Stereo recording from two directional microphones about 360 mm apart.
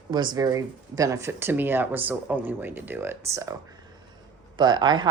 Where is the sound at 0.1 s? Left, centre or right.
Centre.